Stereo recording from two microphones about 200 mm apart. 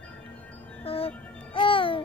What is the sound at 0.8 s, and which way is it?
Music, 30° left (ahead or behind).